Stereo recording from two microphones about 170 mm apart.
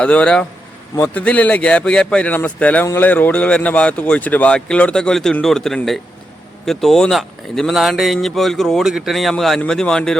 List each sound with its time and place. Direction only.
0.0 s a man's voice: 5° left (ahead or behind)